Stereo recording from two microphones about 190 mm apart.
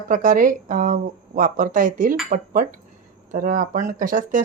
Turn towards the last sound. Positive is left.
turn(degrees=-45)  # may be behind; listen again after turning